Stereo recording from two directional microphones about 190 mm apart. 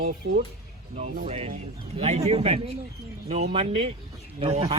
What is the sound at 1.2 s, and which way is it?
A man's voice, 35° right (ahead or behind).